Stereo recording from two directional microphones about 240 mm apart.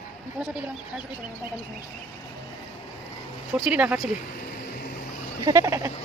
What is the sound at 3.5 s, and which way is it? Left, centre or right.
Speech, centre.